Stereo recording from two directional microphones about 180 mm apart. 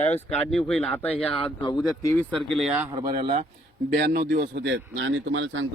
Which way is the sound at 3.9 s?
60° right (ahead or behind).